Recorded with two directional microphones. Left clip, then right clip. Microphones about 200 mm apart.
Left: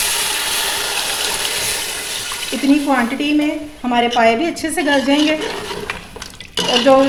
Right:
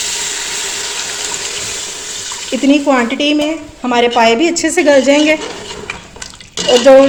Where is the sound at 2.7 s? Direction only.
45° right (ahead or behind).